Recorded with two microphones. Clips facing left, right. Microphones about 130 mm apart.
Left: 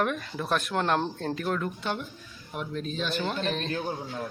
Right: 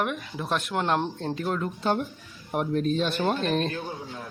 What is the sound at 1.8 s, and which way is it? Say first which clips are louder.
Speech: right 6 dB; 45° right (ahead or behind).